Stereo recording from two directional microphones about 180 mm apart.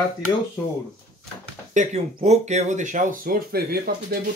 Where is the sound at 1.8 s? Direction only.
40° right (ahead or behind).